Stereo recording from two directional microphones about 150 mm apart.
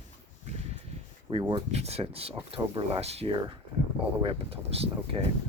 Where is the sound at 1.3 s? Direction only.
35° right (ahead or behind).